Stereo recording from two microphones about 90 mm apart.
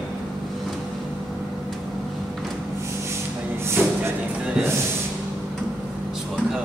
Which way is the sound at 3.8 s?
20° right (ahead or behind).